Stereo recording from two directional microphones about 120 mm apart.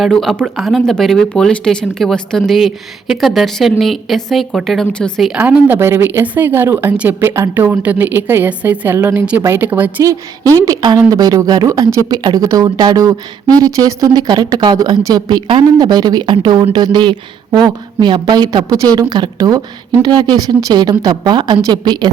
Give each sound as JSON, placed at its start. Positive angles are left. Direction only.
{"t": 0.0, "sound": "speech", "side_deg": 0}
{"t": 5.3, "sound": "a woman's voice", "side_deg": -10}
{"t": 10.0, "sound": "a woman's voice", "side_deg": -30}